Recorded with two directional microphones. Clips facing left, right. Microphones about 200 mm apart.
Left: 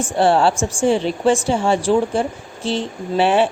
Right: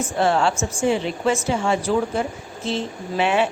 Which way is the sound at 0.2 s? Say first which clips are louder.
Left 5 dB; 30° left (ahead or behind).